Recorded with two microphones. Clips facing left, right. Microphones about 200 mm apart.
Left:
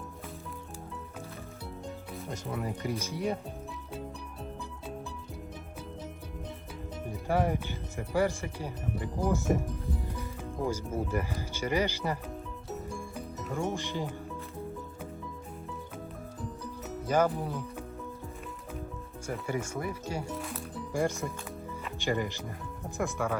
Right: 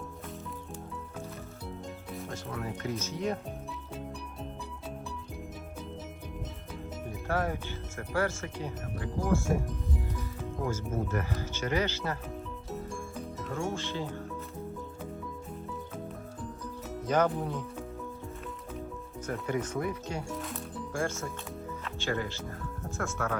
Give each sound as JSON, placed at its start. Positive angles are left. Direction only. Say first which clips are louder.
{"t": 2.5, "sound": "speech", "louder": "left 2 dB", "side_deg": 10}
{"t": 7.3, "sound": "speech", "louder": "left 3 dB", "side_deg": 15}
{"t": 10.7, "sound": "speech", "louder": "left 1 dB", "side_deg": 10}
{"t": 12.9, "sound": "music", "louder": "even", "side_deg": 5}
{"t": 13.7, "sound": "speech", "louder": "left 1 dB", "side_deg": 15}
{"t": 17.1, "sound": "speech", "louder": "even", "side_deg": 5}
{"t": 19.3, "sound": "speech", "louder": "right 1 dB", "side_deg": 10}
{"t": 21.0, "sound": "speech", "louder": "left 3 dB", "side_deg": 15}